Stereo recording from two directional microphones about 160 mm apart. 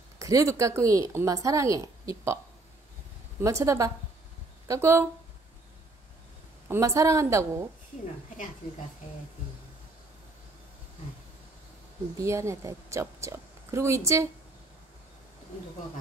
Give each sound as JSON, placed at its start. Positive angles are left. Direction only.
{"t": 0.2, "sound": "speech", "side_deg": -20}
{"t": 3.3, "sound": "speech", "side_deg": -20}
{"t": 6.7, "sound": "speech", "side_deg": -20}
{"t": 12.2, "sound": "a woman's voice", "side_deg": -20}